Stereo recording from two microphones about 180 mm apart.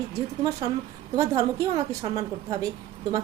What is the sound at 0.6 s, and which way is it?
A woman's voice, 25° right (ahead or behind).